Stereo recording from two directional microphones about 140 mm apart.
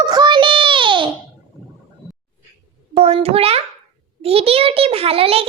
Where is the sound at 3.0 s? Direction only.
45° right (ahead or behind).